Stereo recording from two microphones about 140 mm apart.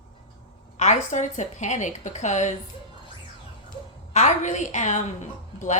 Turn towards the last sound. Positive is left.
turn(degrees=60)  # may be behind; listen again after turning